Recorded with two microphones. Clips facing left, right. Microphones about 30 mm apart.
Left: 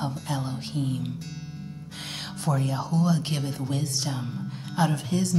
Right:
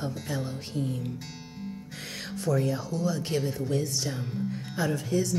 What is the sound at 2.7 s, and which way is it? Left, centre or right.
Speech, left.